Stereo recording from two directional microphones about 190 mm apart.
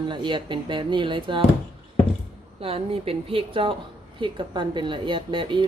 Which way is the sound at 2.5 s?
30° right (ahead or behind).